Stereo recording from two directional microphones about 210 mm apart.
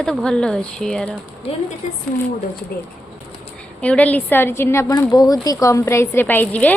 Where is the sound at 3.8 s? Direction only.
5° left (ahead or behind).